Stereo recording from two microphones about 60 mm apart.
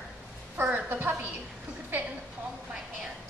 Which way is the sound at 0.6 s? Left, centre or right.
Right.